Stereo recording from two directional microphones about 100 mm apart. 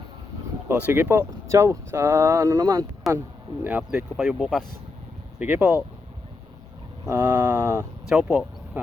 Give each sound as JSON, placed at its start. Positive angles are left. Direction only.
{"t": 0.9, "sound": "speech", "side_deg": -20}
{"t": 3.1, "sound": "speech", "side_deg": 0}
{"t": 3.6, "sound": "speech", "side_deg": -20}
{"t": 4.2, "sound": "speech", "side_deg": -5}
{"t": 5.4, "sound": "speech", "side_deg": -15}
{"t": 7.1, "sound": "speech", "side_deg": -25}
{"t": 8.1, "sound": "speech", "side_deg": -10}